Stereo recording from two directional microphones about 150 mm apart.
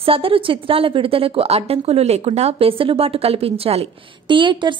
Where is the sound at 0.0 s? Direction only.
40° right (ahead or behind).